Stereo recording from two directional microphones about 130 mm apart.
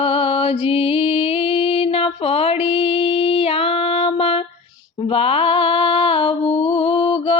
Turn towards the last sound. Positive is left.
turn(degrees=45)  # may be behind; listen again after turning